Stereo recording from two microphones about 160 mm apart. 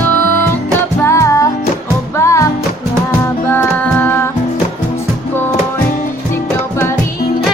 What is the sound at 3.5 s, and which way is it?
Music, 10° left (ahead or behind).